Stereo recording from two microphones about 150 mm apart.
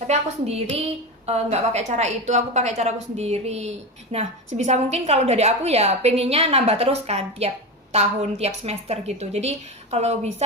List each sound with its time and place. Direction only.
0.1 s a woman's voice: 45° right (ahead or behind)